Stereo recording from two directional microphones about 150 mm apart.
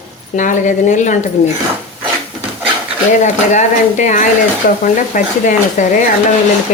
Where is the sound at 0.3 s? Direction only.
55° left (ahead or behind).